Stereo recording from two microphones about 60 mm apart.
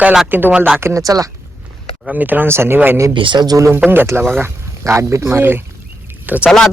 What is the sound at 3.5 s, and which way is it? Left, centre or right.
Speech, right.